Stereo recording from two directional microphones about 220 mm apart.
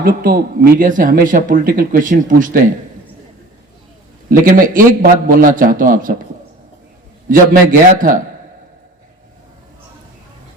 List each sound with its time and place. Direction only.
0.0 s speech: 40° right (ahead or behind)
4.3 s speech: 40° right (ahead or behind)
7.3 s speech: 40° right (ahead or behind)